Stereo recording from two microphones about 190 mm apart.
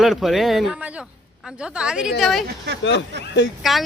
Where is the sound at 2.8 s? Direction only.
70° left (ahead or behind).